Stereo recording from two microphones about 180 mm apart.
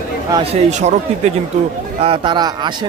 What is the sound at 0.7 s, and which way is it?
Speech, 40° right (ahead or behind).